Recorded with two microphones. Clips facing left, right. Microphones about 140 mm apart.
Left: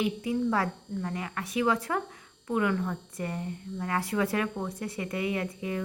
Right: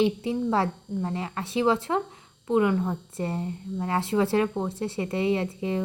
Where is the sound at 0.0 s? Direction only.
25° right (ahead or behind).